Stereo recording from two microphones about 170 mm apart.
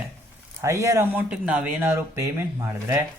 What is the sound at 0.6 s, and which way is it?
Speech, 15° right (ahead or behind).